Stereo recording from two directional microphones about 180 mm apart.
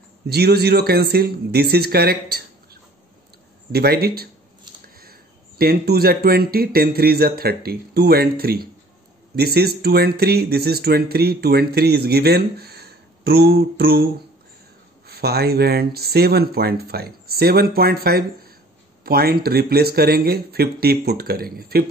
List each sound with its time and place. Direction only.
0.3 s speech: 65° right (ahead or behind)
5.6 s speech: 60° right (ahead or behind)
15.0 s speech: 60° right (ahead or behind)